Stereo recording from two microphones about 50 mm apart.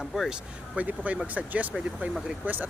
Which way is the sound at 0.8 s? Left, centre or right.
Right.